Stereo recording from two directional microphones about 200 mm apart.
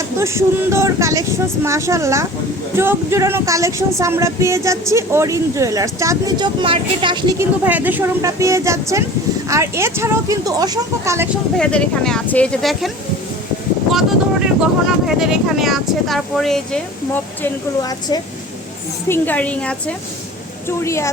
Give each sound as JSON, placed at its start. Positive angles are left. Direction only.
{"t": 0.2, "sound": "speech", "side_deg": -15}
{"t": 11.5, "sound": "speech", "side_deg": 5}
{"t": 13.9, "sound": "speech", "side_deg": 0}
{"t": 17.4, "sound": "a woman's voice", "side_deg": 20}